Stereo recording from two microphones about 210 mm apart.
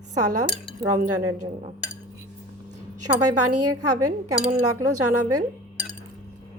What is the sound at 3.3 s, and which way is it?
A woman's voice, 90° right.